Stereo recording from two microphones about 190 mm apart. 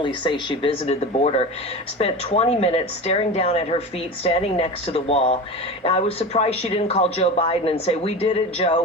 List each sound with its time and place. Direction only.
0.0 s speech: 25° left (ahead or behind)